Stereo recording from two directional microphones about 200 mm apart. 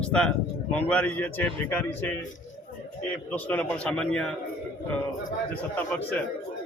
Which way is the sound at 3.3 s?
10° left (ahead or behind).